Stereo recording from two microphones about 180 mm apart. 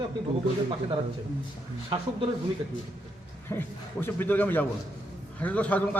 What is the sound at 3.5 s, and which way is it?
A man's voice, 15° left (ahead or behind).